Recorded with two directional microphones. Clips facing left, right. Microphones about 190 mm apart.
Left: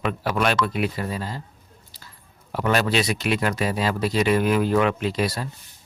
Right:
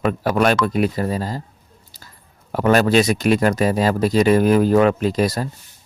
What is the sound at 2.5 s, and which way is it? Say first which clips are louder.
Speech: right 7 dB; 45° right (ahead or behind).